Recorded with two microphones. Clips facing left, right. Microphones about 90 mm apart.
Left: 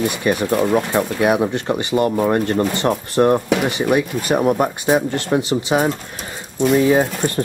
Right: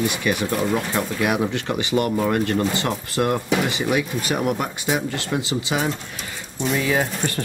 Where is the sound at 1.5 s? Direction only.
30° left (ahead or behind).